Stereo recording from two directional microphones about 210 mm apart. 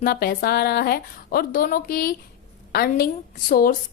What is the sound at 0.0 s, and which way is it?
A woman's voice, 45° left (ahead or behind).